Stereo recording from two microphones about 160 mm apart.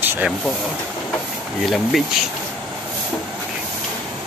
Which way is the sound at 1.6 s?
Centre (ahead or behind).